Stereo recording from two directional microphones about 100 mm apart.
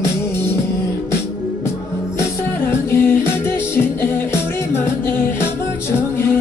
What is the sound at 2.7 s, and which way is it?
Music, 20° left (ahead or behind).